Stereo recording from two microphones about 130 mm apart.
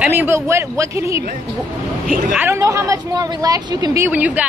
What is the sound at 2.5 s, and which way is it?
Speech, 25° right (ahead or behind).